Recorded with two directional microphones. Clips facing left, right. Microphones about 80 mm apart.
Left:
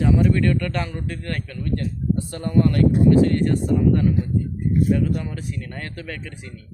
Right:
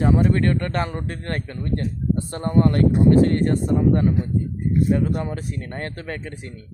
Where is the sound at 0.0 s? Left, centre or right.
Right.